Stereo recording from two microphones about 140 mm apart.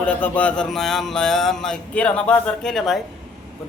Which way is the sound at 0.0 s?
10° left (ahead or behind).